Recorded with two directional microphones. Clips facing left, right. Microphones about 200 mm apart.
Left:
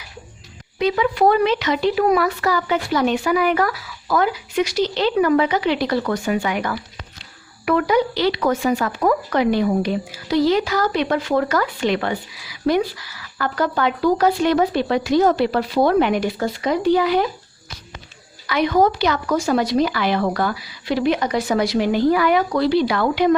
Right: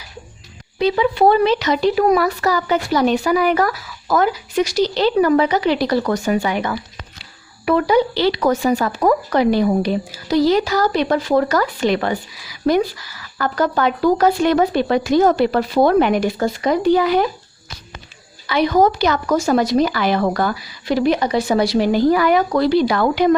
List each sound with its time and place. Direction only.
0.8 s speech: 30° right (ahead or behind); by 17.2 s 45° right (ahead or behind)
18.4 s speech: 35° right (ahead or behind)
21.2 s speech: 30° right (ahead or behind); by 23.3 s 45° right (ahead or behind)